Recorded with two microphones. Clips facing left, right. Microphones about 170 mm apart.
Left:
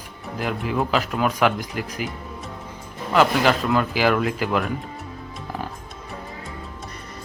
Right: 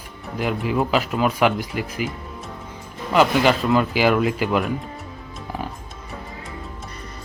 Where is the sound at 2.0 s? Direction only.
45° left (ahead or behind).